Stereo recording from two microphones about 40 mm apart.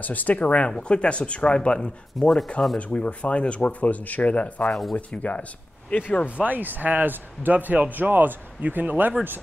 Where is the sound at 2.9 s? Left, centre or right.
Left.